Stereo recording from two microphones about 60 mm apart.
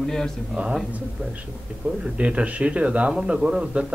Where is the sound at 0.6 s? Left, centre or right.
Right.